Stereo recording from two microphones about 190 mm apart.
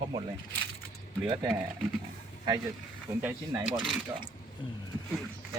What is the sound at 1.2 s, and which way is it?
Speech, 20° right (ahead or behind).